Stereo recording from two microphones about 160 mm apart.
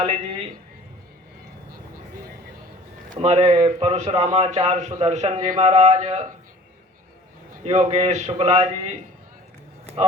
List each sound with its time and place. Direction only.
0.0 s a man's voice: 40° right (ahead or behind)
3.2 s a man's voice: 40° right (ahead or behind)
7.6 s a man's voice: 40° right (ahead or behind)
9.8 s a sound: 40° right (ahead or behind)